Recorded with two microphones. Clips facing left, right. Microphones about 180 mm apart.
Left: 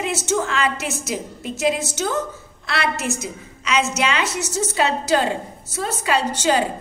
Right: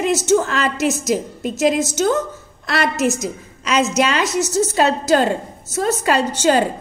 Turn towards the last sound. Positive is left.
turn(degrees=-45)  # may be behind; listen again after turning